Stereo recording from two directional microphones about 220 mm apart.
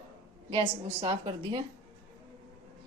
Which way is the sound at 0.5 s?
25° right (ahead or behind).